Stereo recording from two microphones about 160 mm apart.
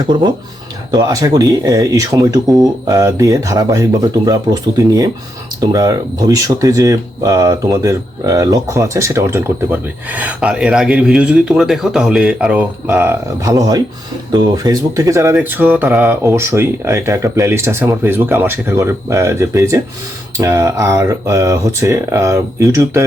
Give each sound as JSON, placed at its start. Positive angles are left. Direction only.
{"t": 0.1, "sound": "speech", "side_deg": -30}
{"t": 5.5, "sound": "speech", "side_deg": -25}